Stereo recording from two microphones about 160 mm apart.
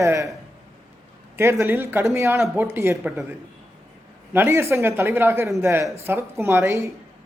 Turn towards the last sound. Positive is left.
turn(degrees=-15)  # may be behind; listen again after turning